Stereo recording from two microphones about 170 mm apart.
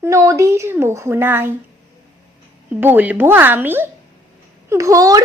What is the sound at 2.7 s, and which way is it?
A woman's voice, 10° right (ahead or behind).